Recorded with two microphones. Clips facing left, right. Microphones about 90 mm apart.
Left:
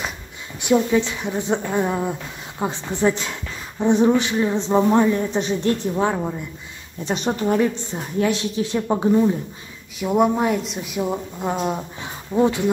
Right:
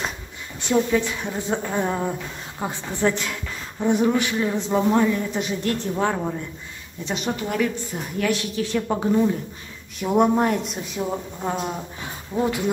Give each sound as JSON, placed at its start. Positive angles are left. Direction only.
{"t": 0.6, "sound": "a woman's voice", "side_deg": 15}
{"t": 5.8, "sound": "a woman's voice", "side_deg": 15}
{"t": 7.1, "sound": "a man's voice", "side_deg": 35}
{"t": 9.9, "sound": "a woman's voice", "side_deg": 0}
{"t": 12.4, "sound": "a man's voice", "side_deg": 25}